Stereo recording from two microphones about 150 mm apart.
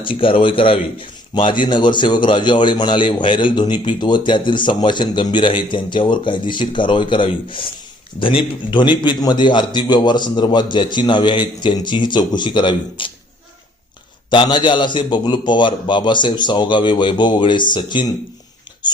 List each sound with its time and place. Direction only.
0.0 s a man's voice: 35° left (ahead or behind)
14.3 s a man's voice: 30° left (ahead or behind)